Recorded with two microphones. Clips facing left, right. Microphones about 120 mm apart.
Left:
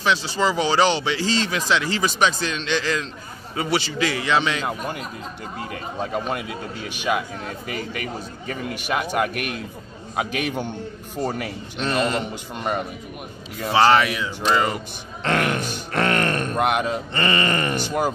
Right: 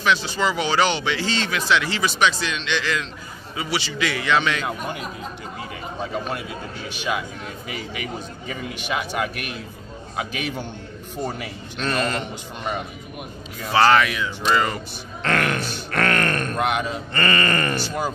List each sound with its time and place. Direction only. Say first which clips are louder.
0.0 s speech: even; 30° left (ahead or behind)
3.5 s a man's voice: left 4 dB; 45° left (ahead or behind)
4.0 s speech: right 2 dB; 30° left (ahead or behind)
6.1 s a man's voice: left 2 dB; 10° left (ahead or behind); by 8.5 s 5° right (ahead or behind)
9.1 s a man's voice: left 3 dB; 5° left (ahead or behind)
11.2 s speech: left 2 dB; 15° right (ahead or behind)
11.8 s a man's voice: left 2 dB; 15° left (ahead or behind)
13.7 s speech: even; 20° left (ahead or behind)
16.5 s a man's voice: left 4 dB; 5° left (ahead or behind)
17.1 s speech: right 2 dB; 20° left (ahead or behind)